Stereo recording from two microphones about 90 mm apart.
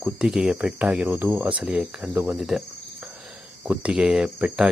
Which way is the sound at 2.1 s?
25° right (ahead or behind).